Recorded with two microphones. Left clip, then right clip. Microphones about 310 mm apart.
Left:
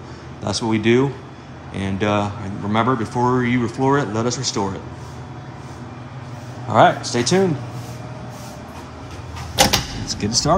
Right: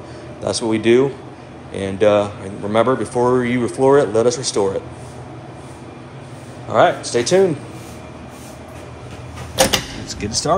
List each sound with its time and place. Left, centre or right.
0.4 s speech: centre
6.7 s speech: centre
10.0 s speech: centre